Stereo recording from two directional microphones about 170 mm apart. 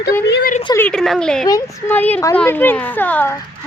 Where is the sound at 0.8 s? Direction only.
5° left (ahead or behind).